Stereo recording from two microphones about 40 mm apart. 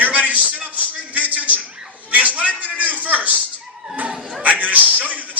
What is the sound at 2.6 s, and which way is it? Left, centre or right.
Music, right.